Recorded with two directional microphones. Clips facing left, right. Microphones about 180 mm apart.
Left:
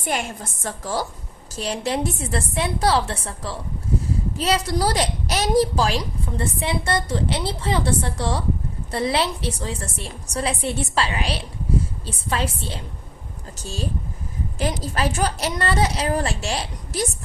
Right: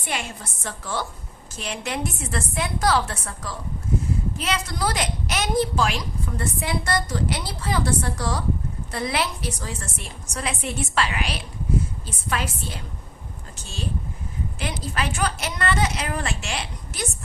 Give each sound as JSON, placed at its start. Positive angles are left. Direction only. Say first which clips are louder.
{"t": 0.0, "sound": "a woman's voice", "louder": "left 4 dB", "side_deg": 45}
{"t": 14.6, "sound": "a woman's voice", "louder": "left 5 dB", "side_deg": 35}